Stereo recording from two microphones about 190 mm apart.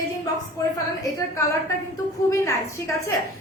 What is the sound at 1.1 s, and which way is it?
A woman's voice, 15° left (ahead or behind).